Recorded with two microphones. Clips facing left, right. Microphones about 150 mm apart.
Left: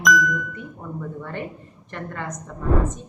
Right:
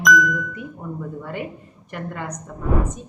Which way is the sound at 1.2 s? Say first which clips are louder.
Right 1 dB; 10° right (ahead or behind).